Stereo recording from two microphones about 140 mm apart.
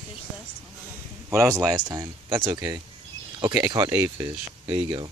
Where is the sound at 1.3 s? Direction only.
20° right (ahead or behind).